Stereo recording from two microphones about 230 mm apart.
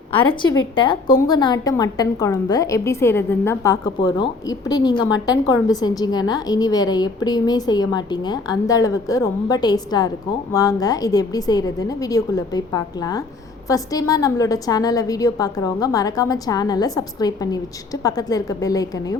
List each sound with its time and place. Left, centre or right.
0.1 s a woman's voice: centre